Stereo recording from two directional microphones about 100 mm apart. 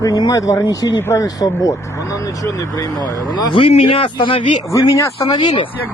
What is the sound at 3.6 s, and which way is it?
Speech, 65° left (ahead or behind).